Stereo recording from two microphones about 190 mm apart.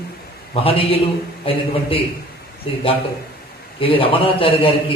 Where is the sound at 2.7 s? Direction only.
30° left (ahead or behind).